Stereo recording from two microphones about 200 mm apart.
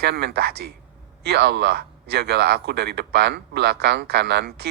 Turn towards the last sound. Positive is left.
turn(degrees=-55)  # may be behind; listen again after turning